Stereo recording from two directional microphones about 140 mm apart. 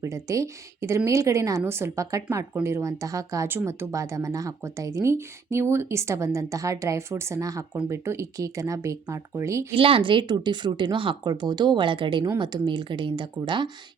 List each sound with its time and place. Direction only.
0.0 s speech: 25° right (ahead or behind)
9.7 s speech: 40° right (ahead or behind)